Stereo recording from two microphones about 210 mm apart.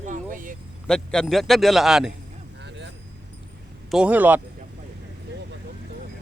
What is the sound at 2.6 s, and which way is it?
Vehicle, 55° right (ahead or behind).